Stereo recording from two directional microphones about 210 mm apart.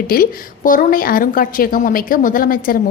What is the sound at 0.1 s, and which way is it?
A woman's voice, 40° left (ahead or behind).